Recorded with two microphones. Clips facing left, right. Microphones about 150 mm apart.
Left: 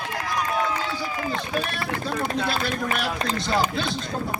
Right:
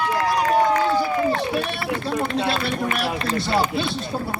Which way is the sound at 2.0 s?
30° right (ahead or behind).